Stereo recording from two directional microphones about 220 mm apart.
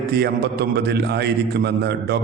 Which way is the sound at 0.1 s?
45° right (ahead or behind).